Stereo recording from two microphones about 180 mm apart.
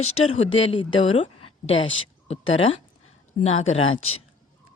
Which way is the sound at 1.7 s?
90° left.